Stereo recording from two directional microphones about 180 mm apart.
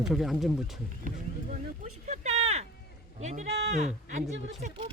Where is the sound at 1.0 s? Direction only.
45° right (ahead or behind).